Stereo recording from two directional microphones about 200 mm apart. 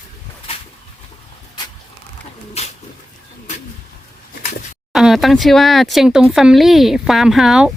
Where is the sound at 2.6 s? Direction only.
30° left (ahead or behind).